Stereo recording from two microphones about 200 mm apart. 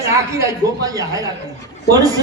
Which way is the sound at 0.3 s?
15° right (ahead or behind).